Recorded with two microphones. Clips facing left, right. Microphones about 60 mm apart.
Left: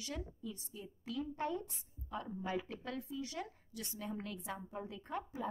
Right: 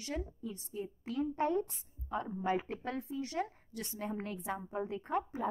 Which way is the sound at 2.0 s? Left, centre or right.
Right.